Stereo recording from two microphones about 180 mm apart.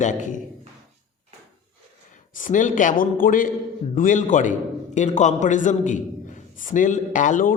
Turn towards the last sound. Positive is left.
turn(degrees=45)  # may be behind; listen again after turning